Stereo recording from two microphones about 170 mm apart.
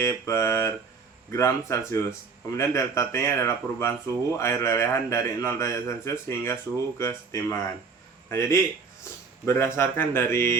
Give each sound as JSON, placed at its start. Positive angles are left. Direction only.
{"t": 0.0, "sound": "speech", "side_deg": 15}